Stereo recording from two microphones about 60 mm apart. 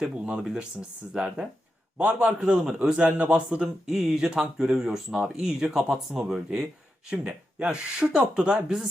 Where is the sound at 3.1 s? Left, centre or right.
Right.